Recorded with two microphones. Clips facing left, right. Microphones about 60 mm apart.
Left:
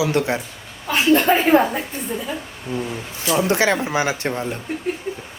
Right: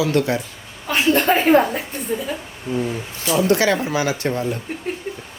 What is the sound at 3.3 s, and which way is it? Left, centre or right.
Speech, left.